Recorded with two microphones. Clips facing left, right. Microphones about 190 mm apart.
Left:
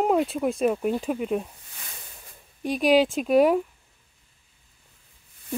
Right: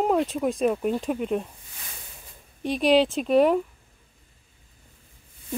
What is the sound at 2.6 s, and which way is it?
Speech, 5° left (ahead or behind).